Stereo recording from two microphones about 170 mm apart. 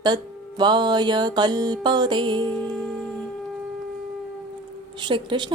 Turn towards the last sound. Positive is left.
turn(degrees=-30)  # may be behind; listen again after turning